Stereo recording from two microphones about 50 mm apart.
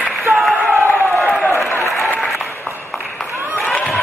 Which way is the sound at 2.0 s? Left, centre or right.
Centre.